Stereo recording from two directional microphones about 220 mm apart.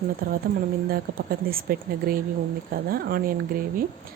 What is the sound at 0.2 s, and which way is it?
A woman's voice, 40° right (ahead or behind).